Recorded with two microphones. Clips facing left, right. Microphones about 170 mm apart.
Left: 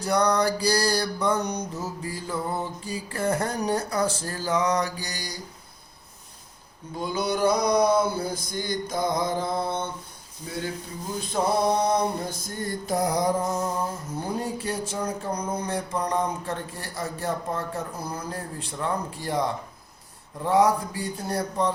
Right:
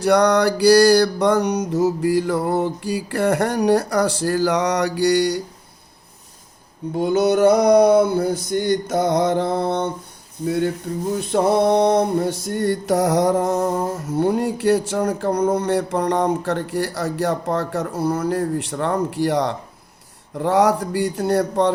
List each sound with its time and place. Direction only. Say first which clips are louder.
0.0 s mantra: right 7 dB; 80° right
6.9 s male singing: right 10 dB; 65° right (ahead or behind)
11.1 s male singing: right 7 dB; 70° right (ahead or behind)
20.4 s mantra: right 4 dB; 80° right